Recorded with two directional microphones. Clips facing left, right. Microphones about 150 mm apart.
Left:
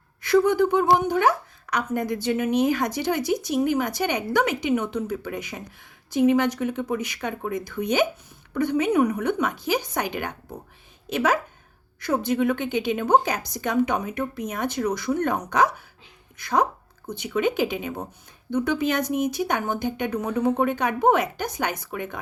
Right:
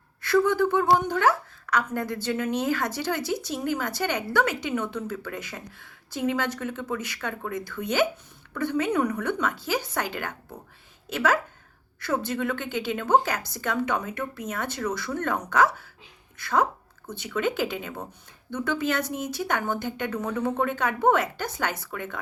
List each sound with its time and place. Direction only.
0.4 s speech: 15° left (ahead or behind)